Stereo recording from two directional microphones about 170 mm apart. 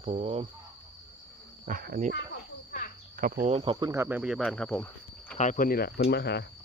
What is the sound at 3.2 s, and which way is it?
Speech, 55° right (ahead or behind).